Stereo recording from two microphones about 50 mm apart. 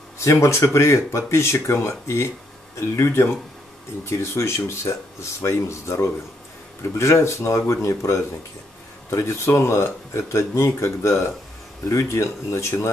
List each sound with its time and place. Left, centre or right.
0.2 s speech: left
3.1 s speech: left
4.0 s speech: left
11.9 s speech: left